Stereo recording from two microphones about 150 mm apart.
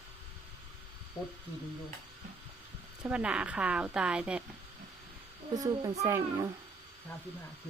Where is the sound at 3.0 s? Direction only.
10° right (ahead or behind).